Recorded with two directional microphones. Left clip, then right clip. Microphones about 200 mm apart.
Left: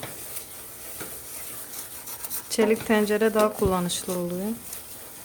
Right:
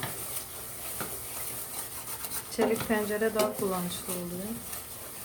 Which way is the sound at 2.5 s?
55° left (ahead or behind).